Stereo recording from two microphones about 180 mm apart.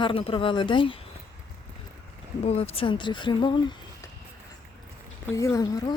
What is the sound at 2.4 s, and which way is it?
Speech, 35° left (ahead or behind).